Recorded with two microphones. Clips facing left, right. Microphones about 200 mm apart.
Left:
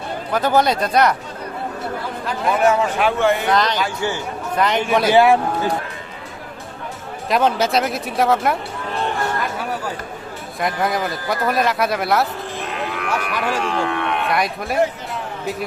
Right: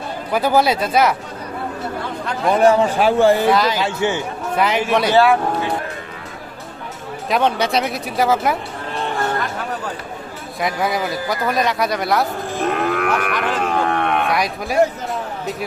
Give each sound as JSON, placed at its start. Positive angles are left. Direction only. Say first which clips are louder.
{"t": 0.3, "sound": "speech", "louder": "right 1 dB", "side_deg": -10}
{"t": 2.5, "sound": "a man's voice", "louder": "right 3 dB", "side_deg": -35}
{"t": 3.5, "sound": "speech", "louder": "right 2 dB", "side_deg": -5}
{"t": 3.8, "sound": "a man's voice", "louder": "right 3 dB", "side_deg": -20}
{"t": 4.5, "sound": "speech", "louder": "even", "side_deg": -5}
{"t": 5.1, "sound": "speech", "louder": "left 1 dB", "side_deg": 20}
{"t": 7.3, "sound": "speech", "louder": "even", "side_deg": 0}
{"t": 10.6, "sound": "speech", "louder": "even", "side_deg": 0}
{"t": 12.5, "sound": "moo", "louder": "right 9 dB", "side_deg": -50}
{"t": 13.6, "sound": "speech", "louder": "right 2 dB", "side_deg": -50}
{"t": 14.3, "sound": "speech", "louder": "even", "side_deg": 0}